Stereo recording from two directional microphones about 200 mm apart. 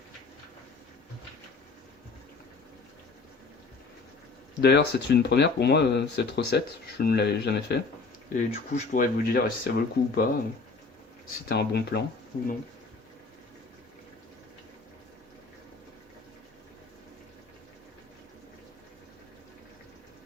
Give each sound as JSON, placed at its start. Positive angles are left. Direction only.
{"t": 4.6, "sound": "speech", "side_deg": 55}
{"t": 8.3, "sound": "speech", "side_deg": 40}
{"t": 11.4, "sound": "speech", "side_deg": 55}
{"t": 12.3, "sound": "speech", "side_deg": 45}